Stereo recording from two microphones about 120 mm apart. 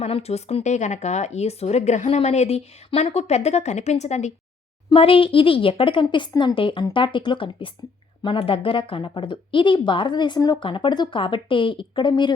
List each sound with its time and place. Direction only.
0.0 s speech: 60° left (ahead or behind)
4.9 s speech: 50° left (ahead or behind)